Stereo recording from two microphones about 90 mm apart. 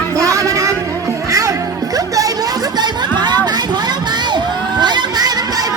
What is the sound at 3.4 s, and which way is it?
Crowd, 55° right (ahead or behind).